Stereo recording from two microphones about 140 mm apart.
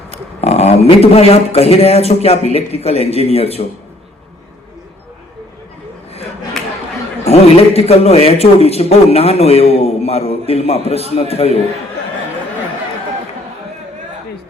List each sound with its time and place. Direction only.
0.1 s a man's voice: 50° left (ahead or behind)
7.3 s a man's voice: 45° left (ahead or behind)